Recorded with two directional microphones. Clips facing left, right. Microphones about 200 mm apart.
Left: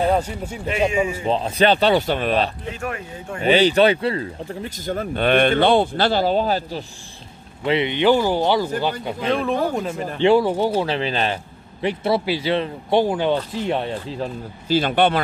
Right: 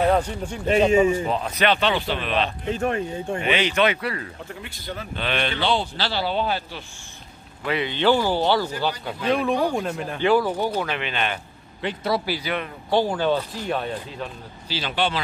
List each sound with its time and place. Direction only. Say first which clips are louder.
0.1 s speech: left 1 dB; 10° left (ahead or behind)
0.7 s speech: right 3 dB; 35° right (ahead or behind)
1.2 s speech: left 4 dB; 30° left (ahead or behind)
2.7 s speech: right 5 dB; 35° right (ahead or behind)
3.4 s speech: left 7 dB; 35° left (ahead or behind)
7.6 s speech: left 4 dB; 25° left (ahead or behind)
9.3 s speech: even; centre (ahead or behind)
10.2 s speech: left 4 dB; 25° left (ahead or behind)
14.7 s speech: left 8 dB; 50° left (ahead or behind)